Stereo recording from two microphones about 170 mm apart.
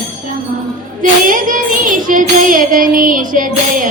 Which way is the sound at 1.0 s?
50° right (ahead or behind).